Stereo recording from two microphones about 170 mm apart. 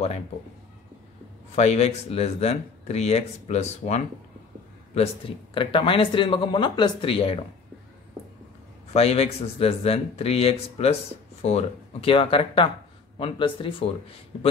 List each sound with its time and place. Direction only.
1.5 s speech: 40° left (ahead or behind)
8.9 s speech: 35° left (ahead or behind)